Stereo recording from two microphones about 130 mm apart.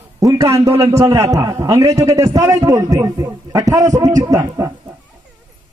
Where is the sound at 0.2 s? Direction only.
25° right (ahead or behind).